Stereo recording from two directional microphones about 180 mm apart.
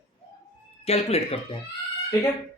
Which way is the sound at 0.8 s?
35° left (ahead or behind).